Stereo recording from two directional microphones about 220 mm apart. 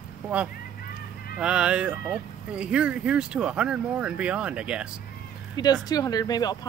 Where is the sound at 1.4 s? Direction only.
5° right (ahead or behind).